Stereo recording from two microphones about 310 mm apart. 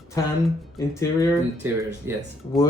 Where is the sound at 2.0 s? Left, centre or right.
Centre.